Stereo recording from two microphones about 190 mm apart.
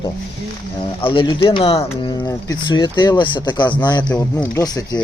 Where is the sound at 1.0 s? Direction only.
25° left (ahead or behind).